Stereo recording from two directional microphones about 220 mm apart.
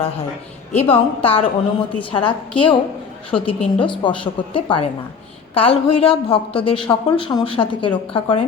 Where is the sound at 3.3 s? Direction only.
25° left (ahead or behind).